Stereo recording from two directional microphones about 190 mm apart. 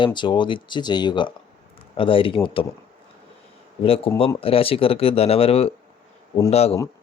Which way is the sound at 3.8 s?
30° left (ahead or behind).